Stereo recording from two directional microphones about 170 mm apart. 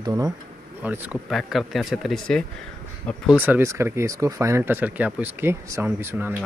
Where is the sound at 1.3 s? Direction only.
Centre (ahead or behind).